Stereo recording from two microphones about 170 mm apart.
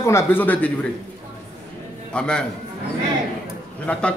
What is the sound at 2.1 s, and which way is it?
Speech, 5° left (ahead or behind).